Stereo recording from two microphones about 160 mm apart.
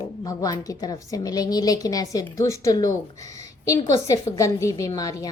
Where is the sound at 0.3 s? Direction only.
20° left (ahead or behind).